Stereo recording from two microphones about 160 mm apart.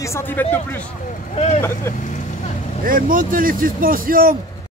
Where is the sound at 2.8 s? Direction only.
60° right (ahead or behind).